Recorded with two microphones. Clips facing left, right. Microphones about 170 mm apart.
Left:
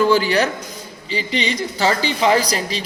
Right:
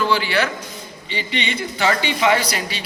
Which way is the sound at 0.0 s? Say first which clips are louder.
Left 4 dB; 40° left (ahead or behind).